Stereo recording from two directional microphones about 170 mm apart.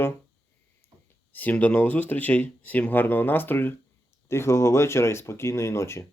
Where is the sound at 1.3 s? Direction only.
10° left (ahead or behind).